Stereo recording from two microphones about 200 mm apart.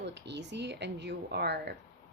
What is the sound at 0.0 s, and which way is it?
Speech, 60° right (ahead or behind).